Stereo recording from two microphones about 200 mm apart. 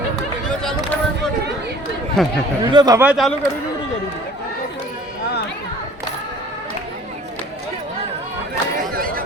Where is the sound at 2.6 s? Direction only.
20° right (ahead or behind).